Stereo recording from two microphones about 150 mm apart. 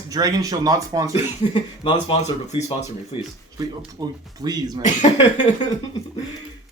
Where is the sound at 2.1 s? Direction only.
45° left (ahead or behind).